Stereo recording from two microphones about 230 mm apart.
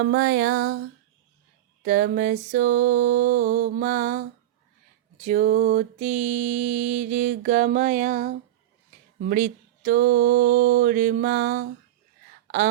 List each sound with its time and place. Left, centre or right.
0.0 s music: right
1.8 s mantra: right